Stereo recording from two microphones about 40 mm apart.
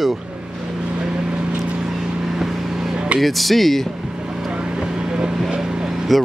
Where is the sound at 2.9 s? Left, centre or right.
Right.